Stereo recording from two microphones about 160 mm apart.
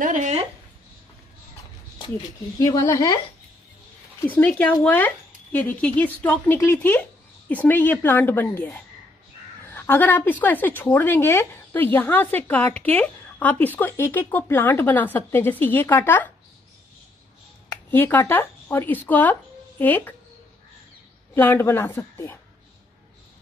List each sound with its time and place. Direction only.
0.0 s a sound: 50° right (ahead or behind)
2.6 s a woman's voice: 25° left (ahead or behind)
4.2 s a woman's voice: 10° left (ahead or behind)
17.9 s a woman's voice: 10° left (ahead or behind)
21.4 s a woman's voice: 15° left (ahead or behind)